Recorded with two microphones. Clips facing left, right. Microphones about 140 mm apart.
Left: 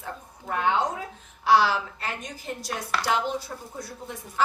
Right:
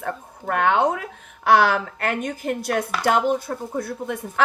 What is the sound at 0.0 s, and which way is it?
A woman's voice, 65° right (ahead or behind).